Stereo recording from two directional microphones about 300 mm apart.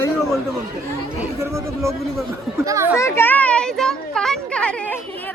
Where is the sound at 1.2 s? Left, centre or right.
Centre.